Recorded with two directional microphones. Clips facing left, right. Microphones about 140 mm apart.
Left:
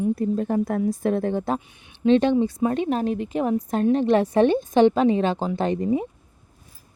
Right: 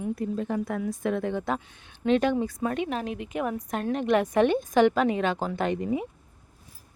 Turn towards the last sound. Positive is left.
turn(degrees=35)  # may be behind; listen again after turning